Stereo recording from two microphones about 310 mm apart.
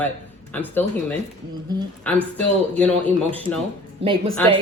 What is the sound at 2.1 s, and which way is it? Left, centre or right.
Speech, centre.